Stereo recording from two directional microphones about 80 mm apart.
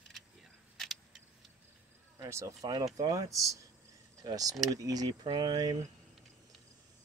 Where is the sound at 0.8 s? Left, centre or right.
Centre.